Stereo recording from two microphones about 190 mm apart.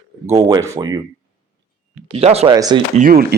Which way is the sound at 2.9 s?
45° right (ahead or behind).